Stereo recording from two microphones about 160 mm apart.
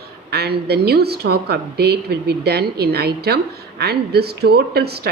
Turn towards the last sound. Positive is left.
turn(degrees=-85)